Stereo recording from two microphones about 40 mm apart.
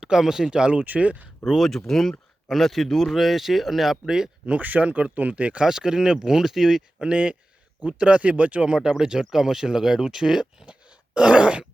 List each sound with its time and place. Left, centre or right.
0.0 s speech: centre; by 1.3 s right
1.5 s speech: centre
4.0 s speech: centre
4.6 s speech: right
5.6 s speech: centre
7.0 s speech: right
8.8 s speech: centre
10.7 s groan: right